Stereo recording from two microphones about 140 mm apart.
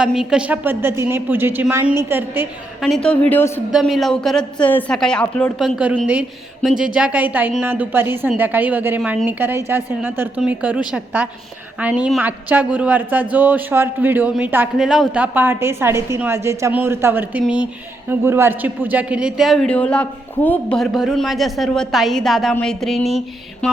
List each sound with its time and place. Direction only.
0.0 s a woman's voice: 5° right (ahead or behind)
2.8 s a woman's voice: 5° left (ahead or behind)
3.7 s a man's voice: centre (ahead or behind)
14.8 s a woman's voice: centre (ahead or behind)
19.6 s a man's voice: 10° left (ahead or behind)